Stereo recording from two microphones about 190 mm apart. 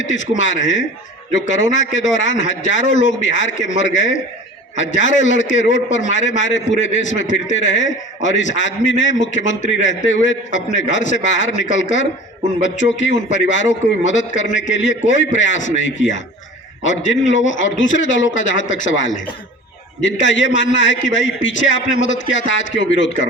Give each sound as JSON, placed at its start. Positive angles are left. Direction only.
{"t": 0.0, "sound": "a man's voice", "side_deg": 80}